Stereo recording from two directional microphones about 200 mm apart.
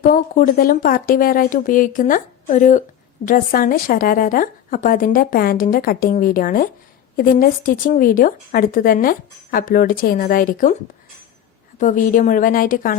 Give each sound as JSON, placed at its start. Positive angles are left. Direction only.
{"t": 0.0, "sound": "a woman's voice", "side_deg": 45}
{"t": 11.8, "sound": "a woman's voice", "side_deg": 40}